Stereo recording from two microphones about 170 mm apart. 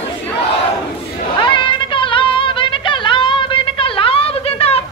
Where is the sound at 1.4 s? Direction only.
30° left (ahead or behind).